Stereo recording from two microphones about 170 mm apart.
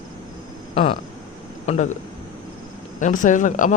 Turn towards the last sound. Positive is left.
turn(degrees=50)  # may be behind; listen again after turning